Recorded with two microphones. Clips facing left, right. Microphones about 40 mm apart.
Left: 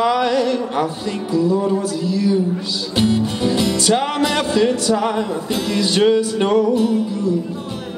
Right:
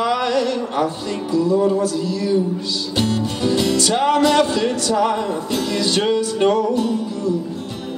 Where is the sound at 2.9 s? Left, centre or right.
Centre.